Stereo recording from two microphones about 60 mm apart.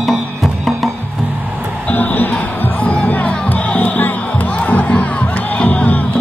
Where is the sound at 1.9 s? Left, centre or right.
Left.